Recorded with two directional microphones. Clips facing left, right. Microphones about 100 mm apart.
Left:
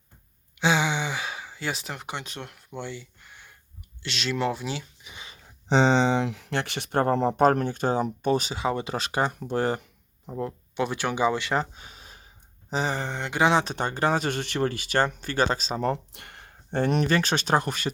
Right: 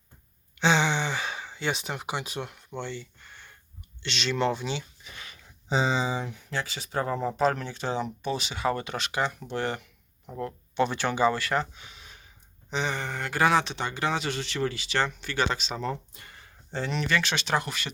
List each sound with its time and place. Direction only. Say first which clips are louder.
0.6 s a sound: even; 10° left (ahead or behind)
4.0 s speech: even; 5° left (ahead or behind)
5.0 s speech: left 1 dB; 20° left (ahead or behind)
5.6 s speech: left 6 dB; 70° left (ahead or behind); by 8.5 s 45° left (ahead or behind)
8.5 s speech: left 1 dB; 25° left (ahead or behind)
10.3 s speech: right 1 dB; 15° left (ahead or behind)
11.5 s a sound: left 1 dB; 35° left (ahead or behind)
12.7 s speech: left 2 dB; 35° left (ahead or behind)
13.7 s speech: left 4 dB; 45° left (ahead or behind)
15.8 s speech: left 5 dB; 60° left (ahead or behind); by 17.9 s 40° left (ahead or behind)